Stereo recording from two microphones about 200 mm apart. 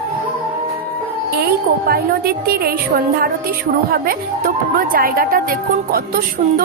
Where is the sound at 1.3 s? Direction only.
50° right (ahead or behind).